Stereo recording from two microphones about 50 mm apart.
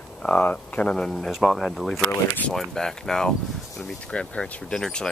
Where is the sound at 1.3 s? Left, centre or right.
Centre.